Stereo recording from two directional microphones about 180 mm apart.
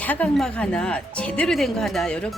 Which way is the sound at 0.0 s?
10° left (ahead or behind).